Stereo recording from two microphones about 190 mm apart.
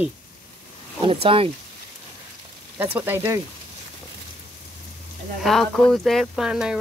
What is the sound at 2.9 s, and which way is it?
Speech, 10° right (ahead or behind).